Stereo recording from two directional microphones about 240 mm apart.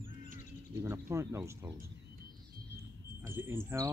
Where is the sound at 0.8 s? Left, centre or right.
Centre.